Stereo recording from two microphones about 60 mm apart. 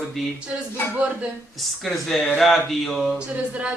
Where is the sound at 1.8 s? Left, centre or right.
Centre.